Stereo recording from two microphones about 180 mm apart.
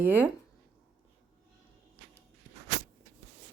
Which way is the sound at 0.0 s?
10° right (ahead or behind).